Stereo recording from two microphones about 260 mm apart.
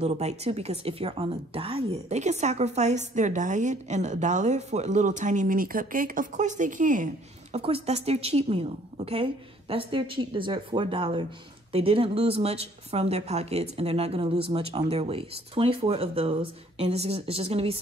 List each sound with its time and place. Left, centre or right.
0.0 s a woman's voice: right